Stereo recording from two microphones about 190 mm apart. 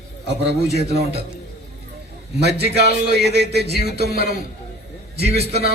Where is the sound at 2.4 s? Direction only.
60° right (ahead or behind).